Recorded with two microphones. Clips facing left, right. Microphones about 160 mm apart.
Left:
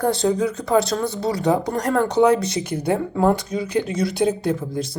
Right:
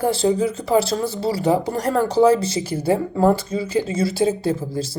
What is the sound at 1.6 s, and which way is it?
Speech, 5° right (ahead or behind).